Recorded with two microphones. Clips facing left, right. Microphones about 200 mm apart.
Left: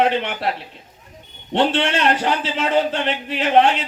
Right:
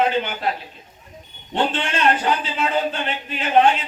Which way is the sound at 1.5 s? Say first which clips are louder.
Left 4 dB; 75° left (ahead or behind).